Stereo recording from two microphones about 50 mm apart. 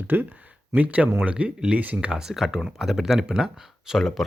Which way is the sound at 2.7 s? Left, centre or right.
Centre.